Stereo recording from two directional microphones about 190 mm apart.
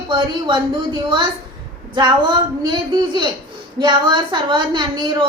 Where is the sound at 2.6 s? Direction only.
25° right (ahead or behind).